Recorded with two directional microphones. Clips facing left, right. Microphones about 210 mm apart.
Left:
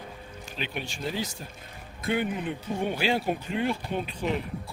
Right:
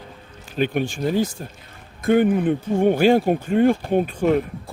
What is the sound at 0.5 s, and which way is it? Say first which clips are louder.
Speech: right 14 dB; 50° right (ahead or behind).